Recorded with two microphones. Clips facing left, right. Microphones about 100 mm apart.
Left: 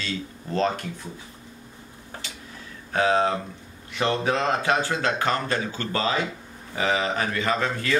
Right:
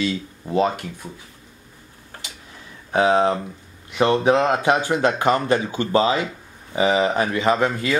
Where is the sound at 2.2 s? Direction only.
20° right (ahead or behind).